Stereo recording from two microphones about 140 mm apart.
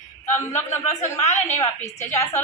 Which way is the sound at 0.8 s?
55° left (ahead or behind).